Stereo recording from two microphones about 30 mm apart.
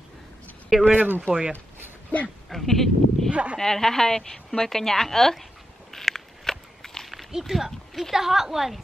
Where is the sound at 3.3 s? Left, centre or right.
Right.